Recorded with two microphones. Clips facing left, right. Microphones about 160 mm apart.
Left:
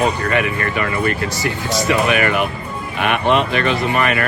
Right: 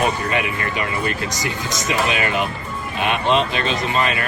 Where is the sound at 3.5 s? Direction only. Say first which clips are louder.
Left 4 dB; 20° right (ahead or behind).